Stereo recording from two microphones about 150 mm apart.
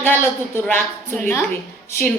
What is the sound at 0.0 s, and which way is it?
A woman's voice, 15° left (ahead or behind).